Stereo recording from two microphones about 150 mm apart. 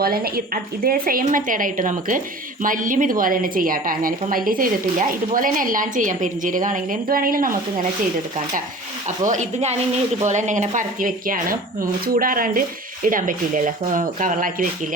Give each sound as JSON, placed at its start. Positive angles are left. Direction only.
{"t": 0.0, "sound": "a woman's voice", "side_deg": -90}
{"t": 9.0, "sound": "speech", "side_deg": -55}